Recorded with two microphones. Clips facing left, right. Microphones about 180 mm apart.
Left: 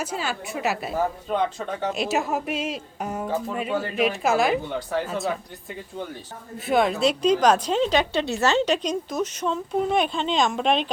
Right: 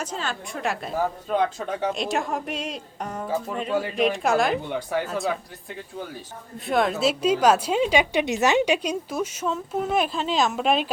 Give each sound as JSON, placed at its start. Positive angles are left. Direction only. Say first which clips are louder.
{"t": 0.0, "sound": "a woman's voice", "louder": "left 2 dB", "side_deg": 10}
{"t": 1.5, "sound": "a woman's voice", "louder": "right 1 dB", "side_deg": -10}
{"t": 1.9, "sound": "a woman's voice", "louder": "left 1 dB", "side_deg": 5}
{"t": 6.7, "sound": "a woman's voice", "louder": "left 1 dB", "side_deg": 0}